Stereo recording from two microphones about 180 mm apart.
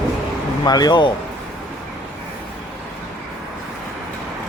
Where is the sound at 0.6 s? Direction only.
20° left (ahead or behind).